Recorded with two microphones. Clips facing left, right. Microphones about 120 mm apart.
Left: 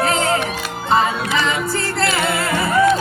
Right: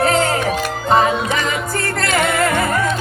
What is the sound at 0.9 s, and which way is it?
Music, 45° right (ahead or behind).